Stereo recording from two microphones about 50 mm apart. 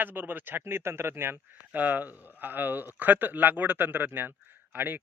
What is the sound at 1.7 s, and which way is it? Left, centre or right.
Speech, right.